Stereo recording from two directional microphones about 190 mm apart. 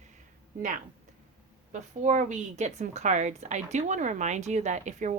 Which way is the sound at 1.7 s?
40° right (ahead or behind).